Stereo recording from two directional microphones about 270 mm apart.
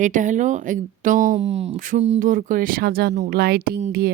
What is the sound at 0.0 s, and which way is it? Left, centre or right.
Speech, right.